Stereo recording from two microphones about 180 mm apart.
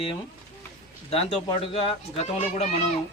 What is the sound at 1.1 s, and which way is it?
Speech, 30° left (ahead or behind).